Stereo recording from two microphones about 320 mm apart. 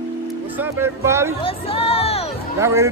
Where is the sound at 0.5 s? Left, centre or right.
Centre.